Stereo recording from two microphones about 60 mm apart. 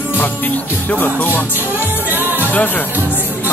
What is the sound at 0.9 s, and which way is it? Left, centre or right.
Music, left.